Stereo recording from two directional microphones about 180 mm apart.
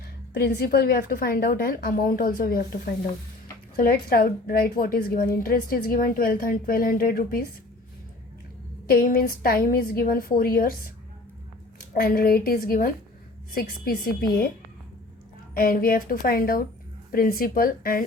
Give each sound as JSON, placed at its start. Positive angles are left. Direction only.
{"t": 0.3, "sound": "a woman's voice", "side_deg": 60}
{"t": 8.9, "sound": "a woman's voice", "side_deg": 55}
{"t": 11.9, "sound": "a woman's voice", "side_deg": 55}
{"t": 15.5, "sound": "a woman's voice", "side_deg": 50}